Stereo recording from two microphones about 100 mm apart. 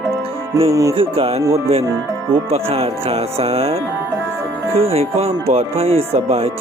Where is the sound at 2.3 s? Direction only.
85° right.